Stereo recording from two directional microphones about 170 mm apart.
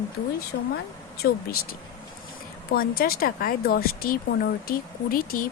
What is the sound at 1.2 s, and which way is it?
Speech, 75° left (ahead or behind).